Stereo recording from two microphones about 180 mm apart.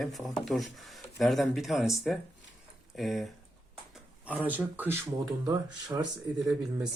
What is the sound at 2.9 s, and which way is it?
Speech, centre (ahead or behind).